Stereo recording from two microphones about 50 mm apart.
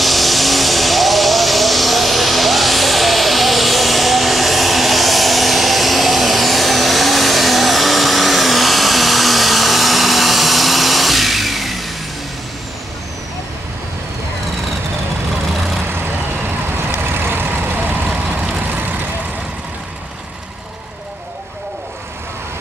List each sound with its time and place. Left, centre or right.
0.0 s vehicle: centre
15.9 s vehicle: right